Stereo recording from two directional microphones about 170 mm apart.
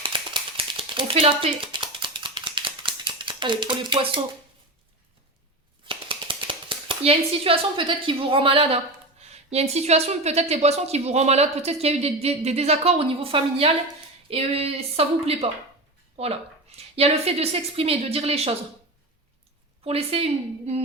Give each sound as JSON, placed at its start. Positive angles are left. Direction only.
{"t": 0.0, "sound": "typewriter", "side_deg": -30}
{"t": 5.8, "sound": "a woman's voice", "side_deg": -30}
{"t": 19.8, "sound": "a woman's voice", "side_deg": -35}